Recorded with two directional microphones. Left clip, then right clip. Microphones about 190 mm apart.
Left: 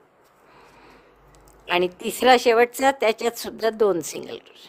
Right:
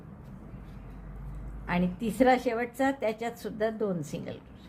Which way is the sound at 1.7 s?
50° left (ahead or behind).